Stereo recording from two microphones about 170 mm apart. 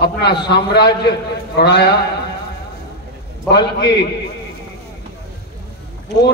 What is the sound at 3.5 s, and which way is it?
Speech, 75° left (ahead or behind).